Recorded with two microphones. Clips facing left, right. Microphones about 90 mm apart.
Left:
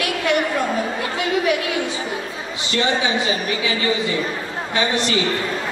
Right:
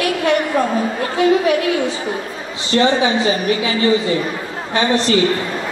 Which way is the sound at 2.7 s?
35° right (ahead or behind).